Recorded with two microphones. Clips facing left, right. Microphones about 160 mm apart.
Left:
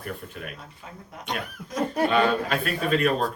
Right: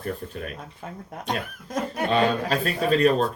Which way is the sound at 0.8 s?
50° right (ahead or behind).